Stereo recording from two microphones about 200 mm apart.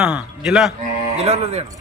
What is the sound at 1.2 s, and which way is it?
Speech, 30° right (ahead or behind).